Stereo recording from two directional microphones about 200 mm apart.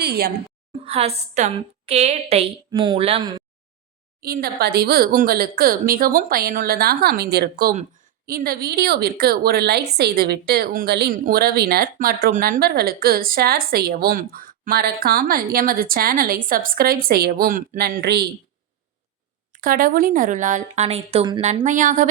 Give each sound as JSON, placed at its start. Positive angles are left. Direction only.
{"t": 0.0, "sound": "a woman's voice", "side_deg": -50}
{"t": 0.9, "sound": "a woman's voice", "side_deg": -30}
{"t": 4.2, "sound": "a woman's voice", "side_deg": -50}
{"t": 19.5, "sound": "a woman's voice", "side_deg": -45}
{"t": 21.4, "sound": "a woman's voice", "side_deg": -35}